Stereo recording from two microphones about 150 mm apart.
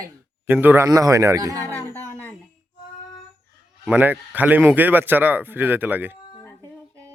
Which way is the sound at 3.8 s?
10° right (ahead or behind).